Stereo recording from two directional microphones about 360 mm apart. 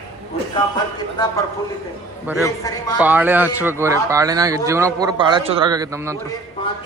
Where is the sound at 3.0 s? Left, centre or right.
Centre.